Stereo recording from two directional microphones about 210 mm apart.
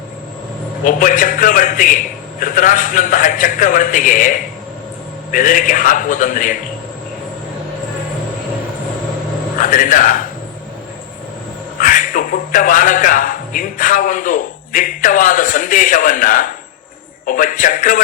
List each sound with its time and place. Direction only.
0.9 s a man's voice: 40° left (ahead or behind)
9.6 s speech: 40° left (ahead or behind)
11.8 s a man's voice: 40° left (ahead or behind)